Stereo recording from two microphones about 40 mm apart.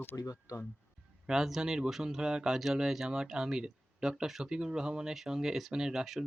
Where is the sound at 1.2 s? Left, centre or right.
Centre.